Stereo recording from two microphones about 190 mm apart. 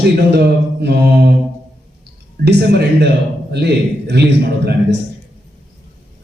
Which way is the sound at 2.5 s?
65° right (ahead or behind).